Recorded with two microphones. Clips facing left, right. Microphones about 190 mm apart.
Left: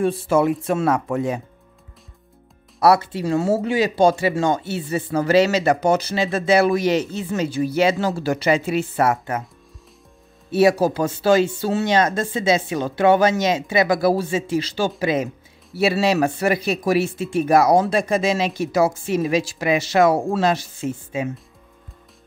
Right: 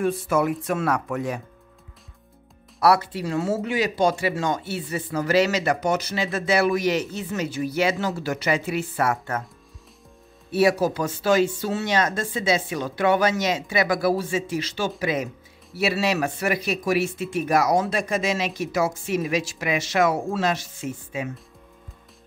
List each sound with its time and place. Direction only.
0.0 s speech: 30° left (ahead or behind)
2.8 s speech: 25° left (ahead or behind)
10.5 s speech: 25° left (ahead or behind)